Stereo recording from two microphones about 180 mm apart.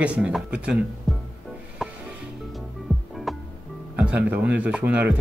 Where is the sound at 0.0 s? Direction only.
5° right (ahead or behind).